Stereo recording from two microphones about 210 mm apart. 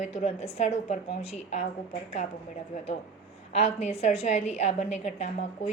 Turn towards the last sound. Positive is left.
turn(degrees=30)  # may be behind; listen again after turning